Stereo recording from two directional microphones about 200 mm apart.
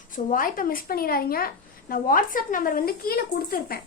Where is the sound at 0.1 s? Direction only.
40° left (ahead or behind).